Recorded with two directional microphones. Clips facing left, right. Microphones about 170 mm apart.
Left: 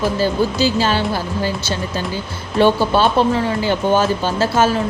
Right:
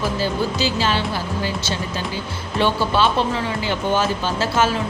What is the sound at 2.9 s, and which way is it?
Speech, 45° left (ahead or behind).